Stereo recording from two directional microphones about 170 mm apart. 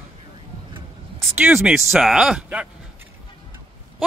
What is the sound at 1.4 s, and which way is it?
Speech, 5° right (ahead or behind).